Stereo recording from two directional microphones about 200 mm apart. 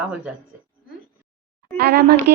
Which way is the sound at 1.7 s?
55° right (ahead or behind).